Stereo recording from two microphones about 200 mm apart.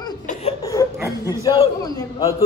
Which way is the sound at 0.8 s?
20° left (ahead or behind).